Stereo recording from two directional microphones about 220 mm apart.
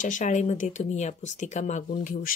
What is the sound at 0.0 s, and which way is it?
Speech, 35° left (ahead or behind).